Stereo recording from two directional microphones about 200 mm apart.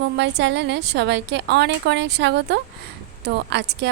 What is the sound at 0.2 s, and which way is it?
A woman's voice, 60° right (ahead or behind).